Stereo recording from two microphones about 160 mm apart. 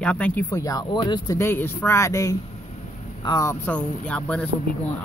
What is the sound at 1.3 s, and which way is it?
Speech, 15° left (ahead or behind).